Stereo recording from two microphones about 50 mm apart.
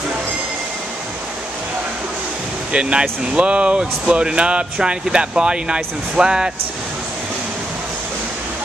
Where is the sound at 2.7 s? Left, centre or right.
Right.